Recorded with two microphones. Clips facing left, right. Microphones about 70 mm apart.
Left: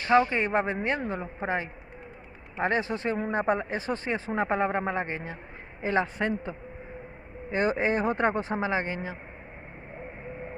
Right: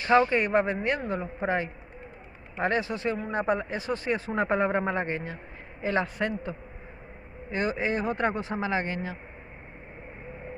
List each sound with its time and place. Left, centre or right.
0.3 s a man's voice: left
1.2 s a woman's voice: centre
2.8 s speech: left
4.3 s a woman's voice: centre
7.5 s speech: left
8.6 s a man's voice: centre